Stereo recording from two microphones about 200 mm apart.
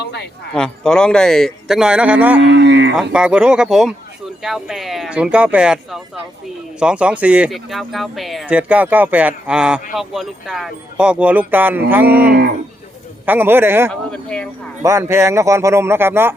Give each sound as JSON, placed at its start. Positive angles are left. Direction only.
{"t": 0.0, "sound": "a sound", "side_deg": 55}
{"t": 0.5, "sound": "speech", "side_deg": 5}
{"t": 2.4, "sound": "livestock", "side_deg": -60}
{"t": 3.0, "sound": "speech", "side_deg": -5}
{"t": 14.1, "sound": "speech", "side_deg": 5}
{"t": 14.8, "sound": "speech", "side_deg": -15}